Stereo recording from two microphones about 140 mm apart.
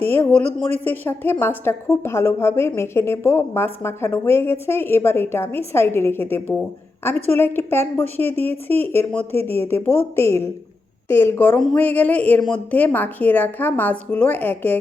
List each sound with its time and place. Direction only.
0.0 s a woman's voice: 15° left (ahead or behind)